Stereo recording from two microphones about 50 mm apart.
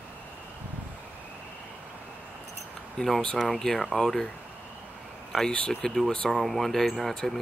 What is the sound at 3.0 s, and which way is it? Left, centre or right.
Speech, centre.